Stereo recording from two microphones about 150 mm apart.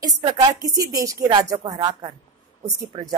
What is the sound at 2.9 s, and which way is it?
Speech, 40° right (ahead or behind).